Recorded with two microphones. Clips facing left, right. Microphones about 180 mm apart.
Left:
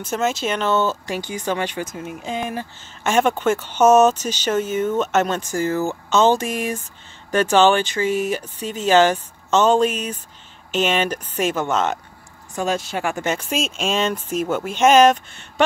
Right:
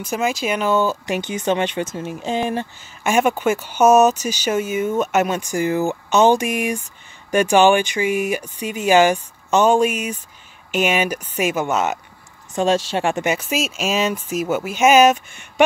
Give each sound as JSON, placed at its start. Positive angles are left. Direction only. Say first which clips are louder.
{"t": 0.0, "sound": "speech", "louder": "even", "side_deg": -10}
{"t": 3.0, "sound": "speech", "louder": "right 1 dB", "side_deg": -10}
{"t": 12.5, "sound": "speech", "louder": "right 5 dB", "side_deg": -25}
{"t": 13.2, "sound": "speech", "louder": "right 2 dB", "side_deg": -10}